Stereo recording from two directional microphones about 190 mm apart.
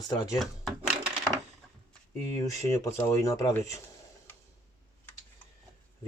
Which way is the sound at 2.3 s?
15° left (ahead or behind).